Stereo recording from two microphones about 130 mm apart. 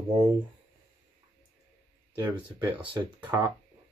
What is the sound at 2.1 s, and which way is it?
Speech, 30° right (ahead or behind).